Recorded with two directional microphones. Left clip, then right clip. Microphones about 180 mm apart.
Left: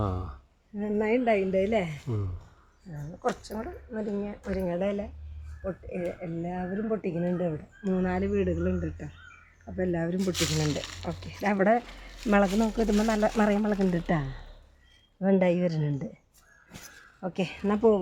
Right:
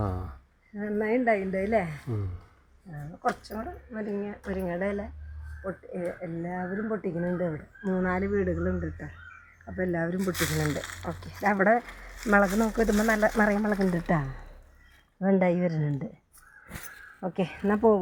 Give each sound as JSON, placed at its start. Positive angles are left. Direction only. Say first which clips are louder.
{"t": 0.0, "sound": "a sound", "louder": "left 1 dB", "side_deg": 0}
{"t": 0.8, "sound": "a woman's voice", "louder": "left 1 dB", "side_deg": 75}
{"t": 3.2, "sound": "a woman's voice", "louder": "right 1 dB", "side_deg": 40}
{"t": 5.6, "sound": "speech", "louder": "even", "side_deg": 25}
{"t": 12.4, "sound": "speech", "louder": "left 1 dB", "side_deg": -5}
{"t": 13.3, "sound": "speech", "louder": "right 1 dB", "side_deg": 5}
{"t": 13.8, "sound": "speech", "louder": "right 1 dB", "side_deg": -5}
{"t": 17.2, "sound": "speech", "louder": "right 1 dB", "side_deg": -20}
{"t": 17.7, "sound": "speech", "louder": "even", "side_deg": -50}